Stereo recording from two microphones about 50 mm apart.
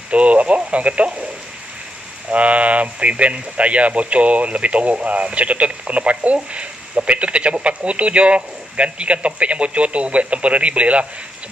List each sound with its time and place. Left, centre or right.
0.1 s speech: right
2.3 s speech: right